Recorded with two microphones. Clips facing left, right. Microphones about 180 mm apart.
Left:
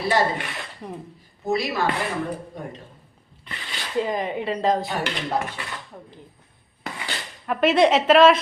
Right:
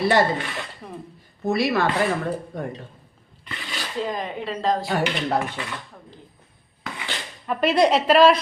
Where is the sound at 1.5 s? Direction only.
65° right (ahead or behind).